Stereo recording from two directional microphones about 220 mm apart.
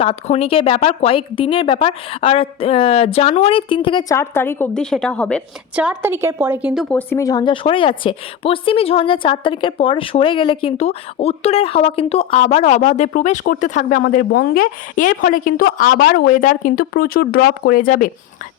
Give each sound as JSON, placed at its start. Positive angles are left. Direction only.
{"t": 0.0, "sound": "speech", "side_deg": 25}
{"t": 5.7, "sound": "a woman's voice", "side_deg": -5}
{"t": 6.8, "sound": "speech", "side_deg": 10}